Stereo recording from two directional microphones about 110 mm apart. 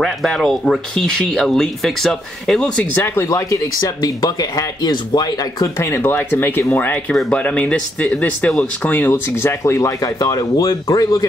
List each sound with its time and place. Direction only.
0.0 s speech: centre (ahead or behind); by 3.3 s 20° left (ahead or behind)
3.3 s speech: 30° left (ahead or behind)
5.8 s speech: 20° left (ahead or behind)